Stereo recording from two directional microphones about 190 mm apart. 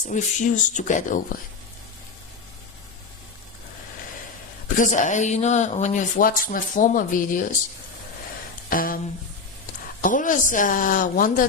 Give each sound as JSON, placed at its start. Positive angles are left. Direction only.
{"t": 0.0, "sound": "speech", "side_deg": 40}
{"t": 4.8, "sound": "speech", "side_deg": 40}
{"t": 8.7, "sound": "speech", "side_deg": 45}
{"t": 10.0, "sound": "speech", "side_deg": 45}